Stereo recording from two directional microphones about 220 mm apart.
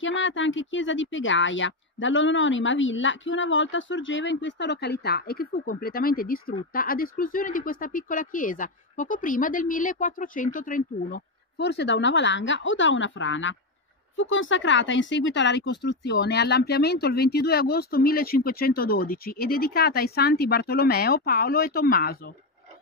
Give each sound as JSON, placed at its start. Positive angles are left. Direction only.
{"t": 0.0, "sound": "speech", "side_deg": 60}